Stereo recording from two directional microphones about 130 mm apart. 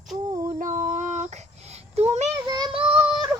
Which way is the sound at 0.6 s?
80° right.